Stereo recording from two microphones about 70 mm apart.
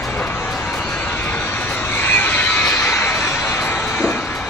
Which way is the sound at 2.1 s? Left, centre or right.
Left.